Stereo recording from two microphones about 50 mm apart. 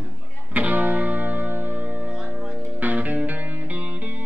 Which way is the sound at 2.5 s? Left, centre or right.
Right.